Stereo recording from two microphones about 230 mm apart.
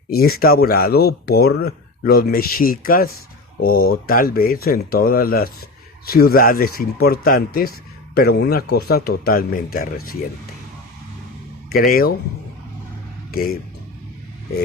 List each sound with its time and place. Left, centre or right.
0.1 s speech: left
11.7 s speech: left
13.3 s speech: left